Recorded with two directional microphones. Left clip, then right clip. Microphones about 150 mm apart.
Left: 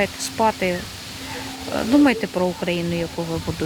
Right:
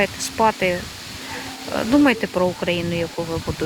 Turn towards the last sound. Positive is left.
turn(degrees=10)  # may be behind; listen again after turning